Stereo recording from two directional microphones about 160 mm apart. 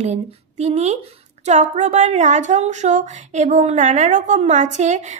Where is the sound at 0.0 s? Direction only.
45° right (ahead or behind).